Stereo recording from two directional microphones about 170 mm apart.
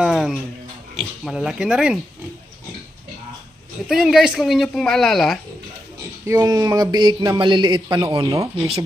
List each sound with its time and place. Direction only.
0.0 s a sound: 5° right (ahead or behind)
0.9 s speech: 5° right (ahead or behind)
3.9 s speech: 5° right (ahead or behind)
6.2 s a man's voice: 20° right (ahead or behind)